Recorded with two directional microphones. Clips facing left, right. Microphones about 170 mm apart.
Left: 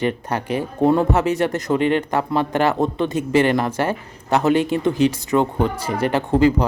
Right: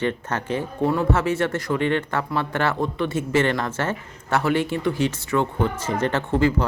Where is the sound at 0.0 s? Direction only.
15° left (ahead or behind).